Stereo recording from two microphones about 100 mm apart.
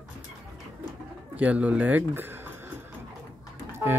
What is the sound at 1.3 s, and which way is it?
Speech, 15° right (ahead or behind).